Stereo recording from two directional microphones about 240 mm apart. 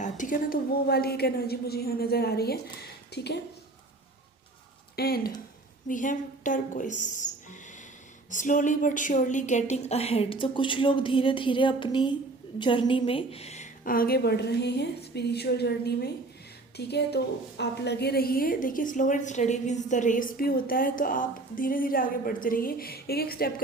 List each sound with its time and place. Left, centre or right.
0.0 s a woman's voice: left
4.9 s a woman's voice: left
8.3 s a woman's voice: left